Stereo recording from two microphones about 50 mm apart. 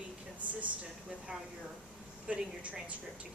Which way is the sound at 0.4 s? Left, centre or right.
Right.